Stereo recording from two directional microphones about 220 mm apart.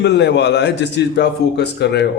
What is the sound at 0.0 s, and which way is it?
A man's voice, 50° left (ahead or behind).